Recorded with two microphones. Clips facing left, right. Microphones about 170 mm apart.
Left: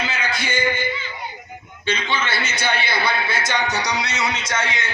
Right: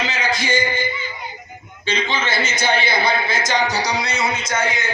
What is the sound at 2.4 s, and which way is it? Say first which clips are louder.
A man's voice: right 4 dB; 60° left (ahead or behind).